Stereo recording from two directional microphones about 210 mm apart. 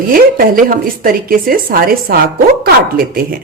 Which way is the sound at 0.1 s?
45° right (ahead or behind).